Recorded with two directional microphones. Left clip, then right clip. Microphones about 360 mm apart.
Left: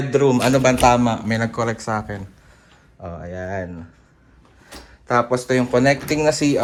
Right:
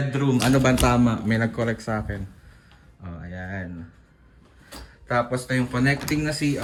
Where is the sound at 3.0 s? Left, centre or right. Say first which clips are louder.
Left 8 dB; left.